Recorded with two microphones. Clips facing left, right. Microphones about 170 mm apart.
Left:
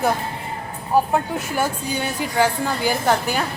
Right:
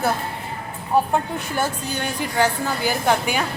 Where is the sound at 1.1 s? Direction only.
10° left (ahead or behind).